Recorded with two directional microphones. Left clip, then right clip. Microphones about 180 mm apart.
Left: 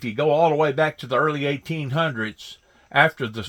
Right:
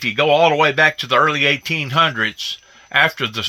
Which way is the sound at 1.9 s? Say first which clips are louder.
Right 8 dB; 30° left (ahead or behind).